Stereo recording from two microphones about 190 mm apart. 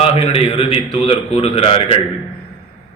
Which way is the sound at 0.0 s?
35° left (ahead or behind).